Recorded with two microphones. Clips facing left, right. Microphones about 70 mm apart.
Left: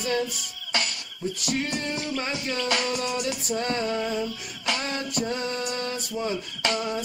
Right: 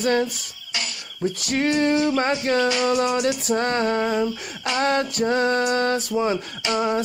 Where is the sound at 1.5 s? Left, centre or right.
Right.